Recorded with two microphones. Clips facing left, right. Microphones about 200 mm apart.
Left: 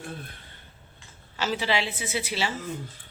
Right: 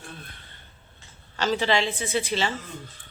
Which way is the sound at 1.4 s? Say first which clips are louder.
Right 3 dB; 5° left (ahead or behind).